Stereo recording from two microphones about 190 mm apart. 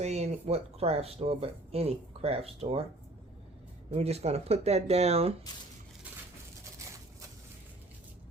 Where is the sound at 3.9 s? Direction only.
35° right (ahead or behind).